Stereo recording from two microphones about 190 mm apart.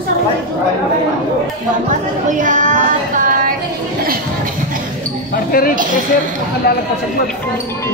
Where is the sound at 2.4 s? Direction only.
40° right (ahead or behind).